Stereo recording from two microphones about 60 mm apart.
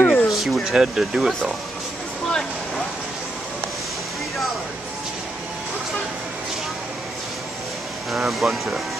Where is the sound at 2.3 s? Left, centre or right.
Centre.